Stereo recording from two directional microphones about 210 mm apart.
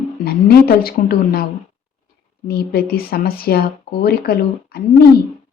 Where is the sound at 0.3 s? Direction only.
45° left (ahead or behind).